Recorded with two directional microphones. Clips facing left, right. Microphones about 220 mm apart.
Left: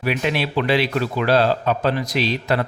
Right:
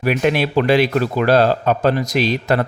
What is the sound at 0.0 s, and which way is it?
Speech, 50° right (ahead or behind).